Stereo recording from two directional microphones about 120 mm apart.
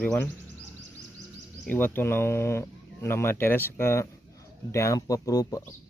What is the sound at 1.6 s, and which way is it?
Speech, 15° left (ahead or behind).